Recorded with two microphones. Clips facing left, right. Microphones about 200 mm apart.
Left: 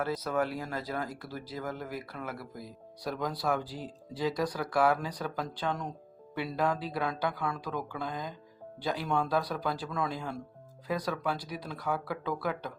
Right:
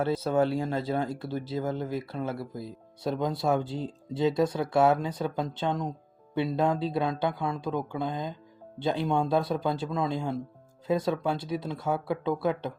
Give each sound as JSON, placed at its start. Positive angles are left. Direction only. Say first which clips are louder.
{"t": 0.0, "sound": "speech", "louder": "right 6 dB", "side_deg": -30}